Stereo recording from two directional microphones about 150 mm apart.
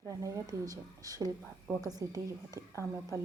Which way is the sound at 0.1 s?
20° right (ahead or behind).